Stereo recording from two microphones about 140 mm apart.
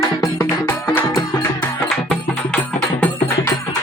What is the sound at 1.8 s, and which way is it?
Music, centre (ahead or behind).